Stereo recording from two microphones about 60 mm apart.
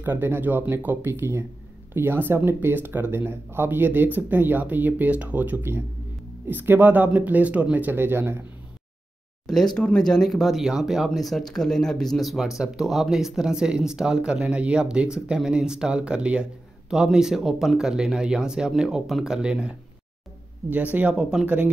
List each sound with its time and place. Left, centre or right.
0.0 s speech: right
5.6 s speech: right
7.9 s speech: right
9.5 s speech: centre
20.7 s speech: right
21.1 s speech: centre